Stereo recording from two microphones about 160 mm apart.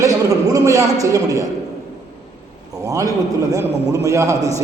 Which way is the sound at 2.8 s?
20° right (ahead or behind).